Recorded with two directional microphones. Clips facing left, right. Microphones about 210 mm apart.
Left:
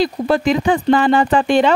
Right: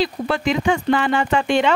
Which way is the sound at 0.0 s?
40° left (ahead or behind).